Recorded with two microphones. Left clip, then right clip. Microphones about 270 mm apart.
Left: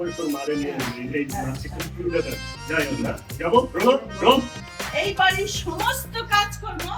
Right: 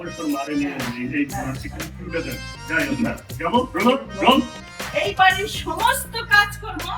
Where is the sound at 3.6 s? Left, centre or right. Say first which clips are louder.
Even; centre.